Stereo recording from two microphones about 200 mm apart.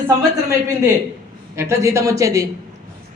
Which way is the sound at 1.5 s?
15° right (ahead or behind).